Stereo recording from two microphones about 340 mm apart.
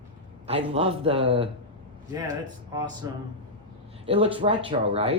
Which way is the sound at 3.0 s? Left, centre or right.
Centre.